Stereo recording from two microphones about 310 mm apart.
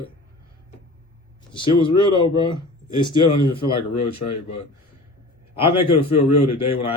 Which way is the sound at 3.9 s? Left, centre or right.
Left.